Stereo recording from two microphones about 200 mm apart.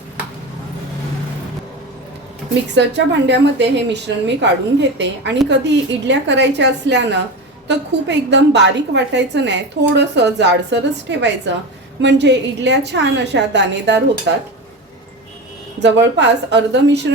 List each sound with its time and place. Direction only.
2.6 s a woman's voice: 60° right (ahead or behind)
15.8 s a woman's voice: 60° right (ahead or behind)